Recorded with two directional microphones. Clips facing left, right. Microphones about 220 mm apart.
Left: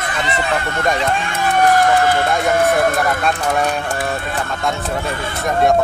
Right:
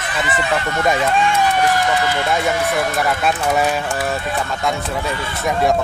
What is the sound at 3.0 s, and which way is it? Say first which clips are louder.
A man's voice: even; 5° right (ahead or behind).